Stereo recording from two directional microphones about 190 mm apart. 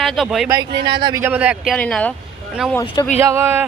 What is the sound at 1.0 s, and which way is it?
Speech, 15° right (ahead or behind).